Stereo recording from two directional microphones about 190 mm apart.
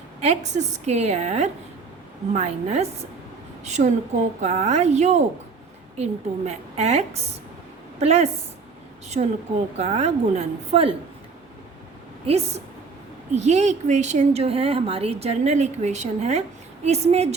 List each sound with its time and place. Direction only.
0.2 s a woman's voice: 35° right (ahead or behind)
12.2 s a woman's voice: 35° right (ahead or behind)